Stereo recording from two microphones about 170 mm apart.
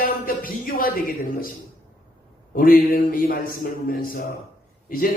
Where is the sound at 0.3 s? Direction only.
55° left (ahead or behind).